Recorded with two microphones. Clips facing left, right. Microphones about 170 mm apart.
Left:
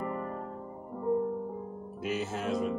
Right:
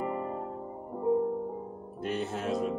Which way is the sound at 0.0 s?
20° right (ahead or behind).